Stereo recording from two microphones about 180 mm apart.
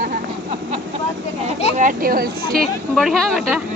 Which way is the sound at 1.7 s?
45° right (ahead or behind).